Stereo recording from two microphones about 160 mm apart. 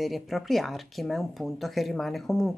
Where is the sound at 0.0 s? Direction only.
Centre (ahead or behind).